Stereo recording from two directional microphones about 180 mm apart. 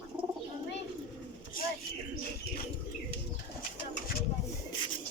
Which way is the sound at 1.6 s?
50° left (ahead or behind).